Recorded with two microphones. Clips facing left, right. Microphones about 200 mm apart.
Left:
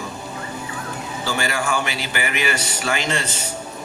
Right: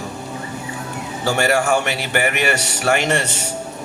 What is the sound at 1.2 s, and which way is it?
A man's voice, 65° right (ahead or behind).